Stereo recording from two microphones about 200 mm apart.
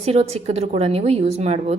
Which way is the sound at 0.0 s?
30° right (ahead or behind).